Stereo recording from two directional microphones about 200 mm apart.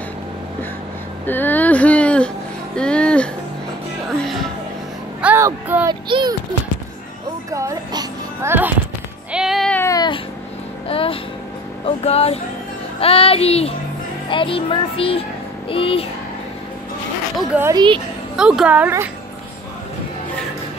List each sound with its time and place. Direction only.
1.2 s music: 10° left (ahead or behind)
5.2 s speech: 10° right (ahead or behind)
6.0 s speech: 25° right (ahead or behind)
7.5 s a child's voice: 15° right (ahead or behind)
9.3 s child singing: centre (ahead or behind); by 10.2 s 20° left (ahead or behind)
10.9 s a sound: 25° left (ahead or behind)
11.8 s speech: 30° left (ahead or behind)
17.4 s a woman's voice: 10° right (ahead or behind)
17.7 s speech: 25° right (ahead or behind)
18.3 s a woman's voice: 5° right (ahead or behind)